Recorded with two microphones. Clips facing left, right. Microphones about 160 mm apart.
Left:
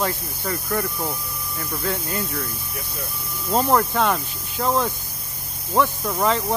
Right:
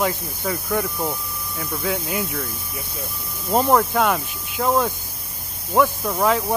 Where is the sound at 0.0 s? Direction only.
5° right (ahead or behind).